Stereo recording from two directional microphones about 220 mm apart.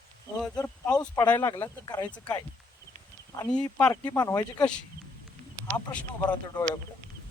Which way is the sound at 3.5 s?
5° left (ahead or behind).